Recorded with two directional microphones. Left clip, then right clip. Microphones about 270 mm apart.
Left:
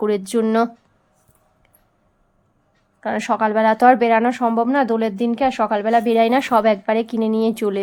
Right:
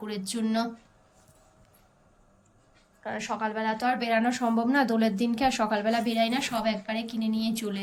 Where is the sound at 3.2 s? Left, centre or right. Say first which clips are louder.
Left 13 dB; centre.